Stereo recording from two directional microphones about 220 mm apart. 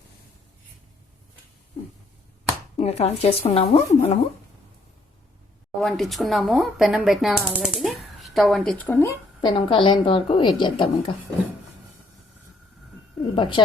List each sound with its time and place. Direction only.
2.7 s speech: 30° left (ahead or behind)
5.8 s speech: centre (ahead or behind); by 11.1 s 20° left (ahead or behind)
13.3 s speech: 20° left (ahead or behind)